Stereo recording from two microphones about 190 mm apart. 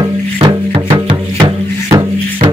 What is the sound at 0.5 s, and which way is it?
Music, 20° right (ahead or behind).